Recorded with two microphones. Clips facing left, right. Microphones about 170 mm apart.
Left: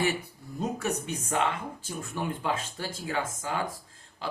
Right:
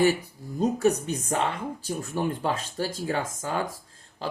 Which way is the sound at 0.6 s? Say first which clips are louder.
Right 8 dB; 35° right (ahead or behind).